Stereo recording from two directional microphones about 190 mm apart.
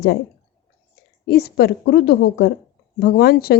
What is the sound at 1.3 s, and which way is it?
A woman's voice, 60° left (ahead or behind).